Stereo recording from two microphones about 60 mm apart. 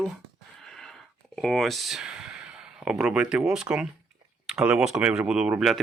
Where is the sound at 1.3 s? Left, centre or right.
Centre.